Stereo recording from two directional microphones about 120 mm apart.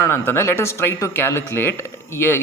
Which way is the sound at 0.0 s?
20° left (ahead or behind).